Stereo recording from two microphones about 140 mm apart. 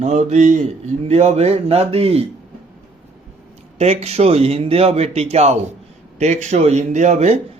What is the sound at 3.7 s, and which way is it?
A man's voice, 45° right (ahead or behind).